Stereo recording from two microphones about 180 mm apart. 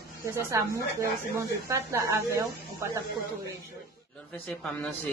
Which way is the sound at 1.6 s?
15° right (ahead or behind).